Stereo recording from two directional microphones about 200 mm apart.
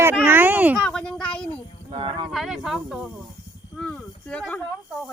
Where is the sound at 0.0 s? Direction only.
10° right (ahead or behind).